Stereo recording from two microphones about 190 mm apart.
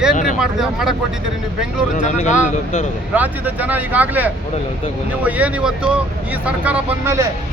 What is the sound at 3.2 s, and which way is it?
Speech, 10° right (ahead or behind).